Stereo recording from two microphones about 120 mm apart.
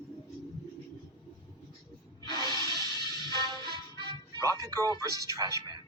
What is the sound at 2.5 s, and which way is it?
Music, 35° left (ahead or behind).